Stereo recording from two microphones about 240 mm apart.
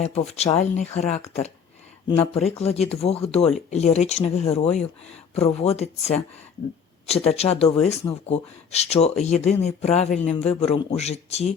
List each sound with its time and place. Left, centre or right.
0.0 s speech: left